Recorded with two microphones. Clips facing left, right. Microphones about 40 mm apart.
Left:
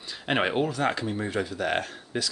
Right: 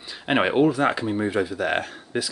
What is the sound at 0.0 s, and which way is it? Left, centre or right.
Speech, centre.